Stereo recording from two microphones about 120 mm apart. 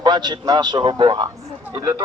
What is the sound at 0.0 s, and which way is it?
Speech, 35° right (ahead or behind).